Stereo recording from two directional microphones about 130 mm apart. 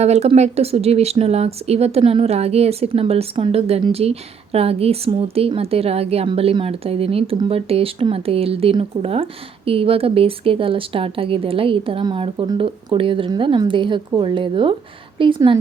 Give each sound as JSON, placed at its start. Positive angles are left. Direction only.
{"t": 0.0, "sound": "speech", "side_deg": -55}